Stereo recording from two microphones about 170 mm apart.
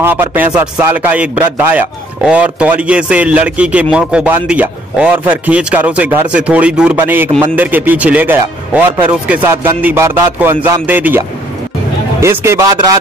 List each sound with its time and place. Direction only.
0.0 s a man's voice: 10° right (ahead or behind)